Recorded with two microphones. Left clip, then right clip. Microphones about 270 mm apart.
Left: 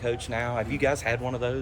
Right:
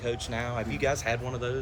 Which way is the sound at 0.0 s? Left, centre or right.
Left.